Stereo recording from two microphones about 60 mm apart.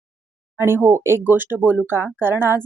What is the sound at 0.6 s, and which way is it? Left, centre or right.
Speech, right.